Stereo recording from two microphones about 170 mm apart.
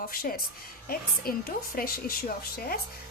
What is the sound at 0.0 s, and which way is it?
A woman's voice, 60° left (ahead or behind).